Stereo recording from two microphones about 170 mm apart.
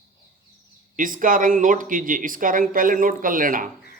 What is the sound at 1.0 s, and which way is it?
Speech, 55° right (ahead or behind).